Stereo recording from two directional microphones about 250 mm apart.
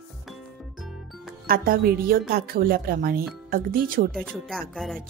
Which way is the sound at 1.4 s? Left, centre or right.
Right.